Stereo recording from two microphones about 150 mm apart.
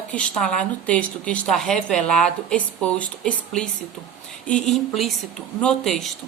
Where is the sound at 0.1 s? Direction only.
10° left (ahead or behind).